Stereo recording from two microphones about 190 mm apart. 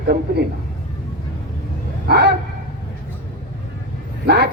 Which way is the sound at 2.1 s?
60° right (ahead or behind).